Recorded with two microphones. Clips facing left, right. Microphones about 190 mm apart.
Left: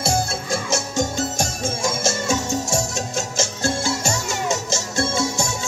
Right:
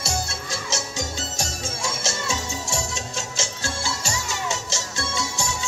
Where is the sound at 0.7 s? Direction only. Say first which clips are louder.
Left 6 dB; 50° left (ahead or behind).